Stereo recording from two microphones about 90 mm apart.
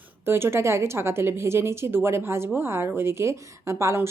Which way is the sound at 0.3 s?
25° right (ahead or behind).